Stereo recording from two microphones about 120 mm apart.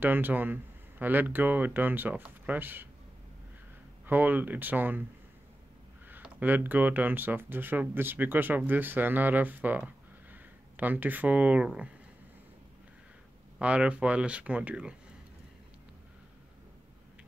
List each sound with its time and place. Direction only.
0.0 s speech: 15° right (ahead or behind)
4.0 s speech: 15° right (ahead or behind)
6.4 s speech: 15° right (ahead or behind)
13.6 s speech: 10° right (ahead or behind)